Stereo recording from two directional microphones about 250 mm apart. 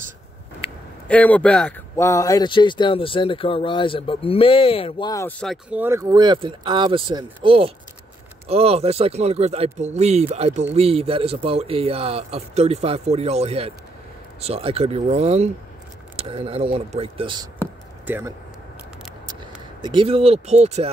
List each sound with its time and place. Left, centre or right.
1.0 s speech: centre
5.4 s a man's voice: centre; by 17.5 s right
18.0 s speech: centre
19.8 s a man's voice: centre